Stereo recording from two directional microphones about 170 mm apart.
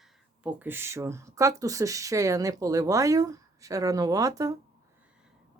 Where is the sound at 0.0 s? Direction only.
10° right (ahead or behind).